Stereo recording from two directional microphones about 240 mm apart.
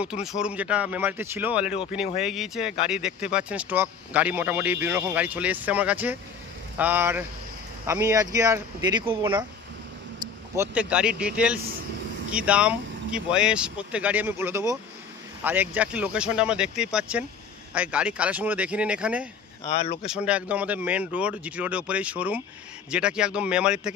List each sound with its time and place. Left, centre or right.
0.0 s speech: centre
19.6 s speech: left
20.1 s speech: centre